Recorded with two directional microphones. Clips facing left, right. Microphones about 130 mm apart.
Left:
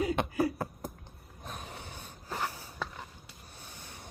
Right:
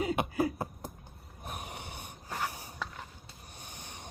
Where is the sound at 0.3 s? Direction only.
20° right (ahead or behind).